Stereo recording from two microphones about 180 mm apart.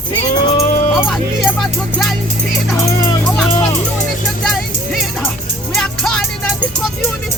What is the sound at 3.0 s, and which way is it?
Speech, 20° left (ahead or behind).